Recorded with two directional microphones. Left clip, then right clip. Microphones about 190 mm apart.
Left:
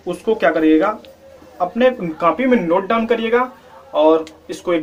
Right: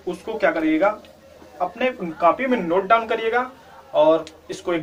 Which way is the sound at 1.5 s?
55° left (ahead or behind).